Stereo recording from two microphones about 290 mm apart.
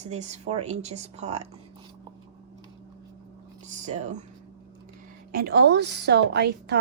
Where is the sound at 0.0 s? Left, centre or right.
Right.